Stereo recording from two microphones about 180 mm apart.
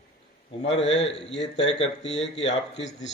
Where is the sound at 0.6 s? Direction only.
35° left (ahead or behind).